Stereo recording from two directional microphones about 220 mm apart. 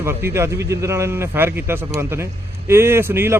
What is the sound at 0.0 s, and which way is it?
Speech, 10° right (ahead or behind).